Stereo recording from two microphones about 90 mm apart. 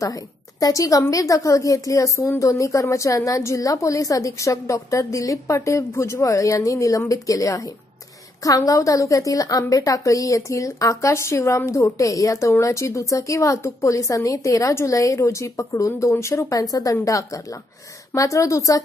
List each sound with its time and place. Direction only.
0.0 s a woman's voice: 40° left (ahead or behind)